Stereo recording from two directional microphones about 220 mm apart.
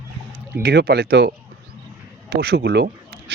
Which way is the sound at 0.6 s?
45° right (ahead or behind).